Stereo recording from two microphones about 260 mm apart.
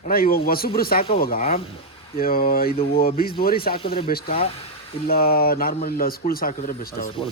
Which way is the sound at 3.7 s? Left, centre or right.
Left.